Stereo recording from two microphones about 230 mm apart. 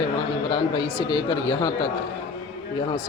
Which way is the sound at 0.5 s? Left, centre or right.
Centre.